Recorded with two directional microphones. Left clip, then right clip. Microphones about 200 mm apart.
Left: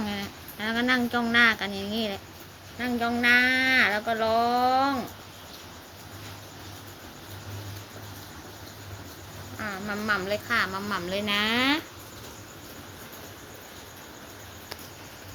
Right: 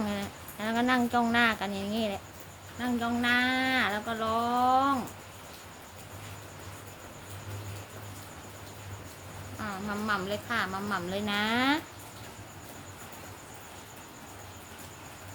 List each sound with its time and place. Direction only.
0.0 s speech: 20° right (ahead or behind)
10.1 s speech: 15° right (ahead or behind)